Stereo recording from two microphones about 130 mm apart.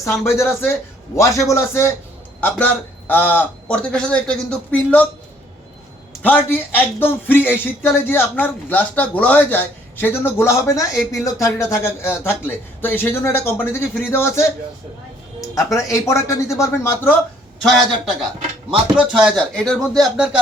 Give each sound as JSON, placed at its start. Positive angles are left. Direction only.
{"t": 0.3, "sound": "speech", "side_deg": 20}
{"t": 6.2, "sound": "speech", "side_deg": 15}
{"t": 17.6, "sound": "speech", "side_deg": 0}
{"t": 19.5, "sound": "speech", "side_deg": 5}